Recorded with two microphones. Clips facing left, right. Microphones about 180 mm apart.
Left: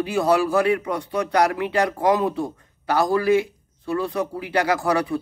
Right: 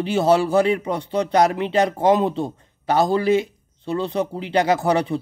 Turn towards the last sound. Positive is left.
turn(degrees=-25)  # may be behind; listen again after turning